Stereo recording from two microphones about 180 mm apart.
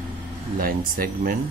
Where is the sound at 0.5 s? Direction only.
55° right (ahead or behind).